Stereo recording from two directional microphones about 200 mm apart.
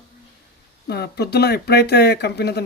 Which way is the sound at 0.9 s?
55° left (ahead or behind).